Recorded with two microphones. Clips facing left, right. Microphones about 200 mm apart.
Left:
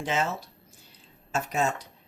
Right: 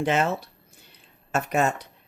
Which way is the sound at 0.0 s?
60° right (ahead or behind).